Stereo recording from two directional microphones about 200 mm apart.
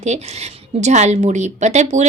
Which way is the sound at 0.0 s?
35° right (ahead or behind).